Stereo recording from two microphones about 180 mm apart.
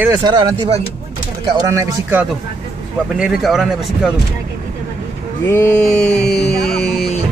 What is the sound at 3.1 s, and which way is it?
Speech, 5° right (ahead or behind).